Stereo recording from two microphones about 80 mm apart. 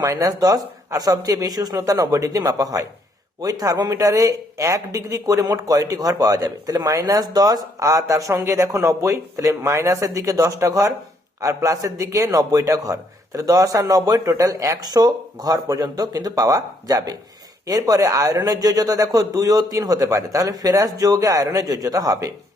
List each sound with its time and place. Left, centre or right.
0.0 s a man's voice: right